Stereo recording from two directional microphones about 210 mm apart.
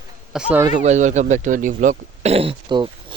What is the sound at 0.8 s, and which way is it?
Speech, 35° right (ahead or behind).